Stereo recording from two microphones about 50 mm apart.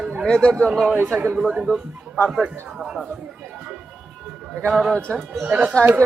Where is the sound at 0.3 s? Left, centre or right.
Centre.